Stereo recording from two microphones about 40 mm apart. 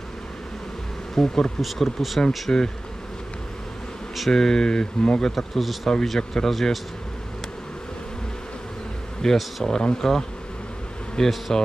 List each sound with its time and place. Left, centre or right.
1.1 s speech: centre
1.6 s speech: centre
2.5 s bee: left
4.3 s speech: centre
5.3 s speech: centre
6.1 s speech: centre
6.5 s speech: centre
9.2 s speech: centre